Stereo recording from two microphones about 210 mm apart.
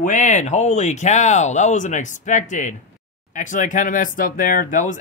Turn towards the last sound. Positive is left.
turn(degrees=40)  # may be behind; listen again after turning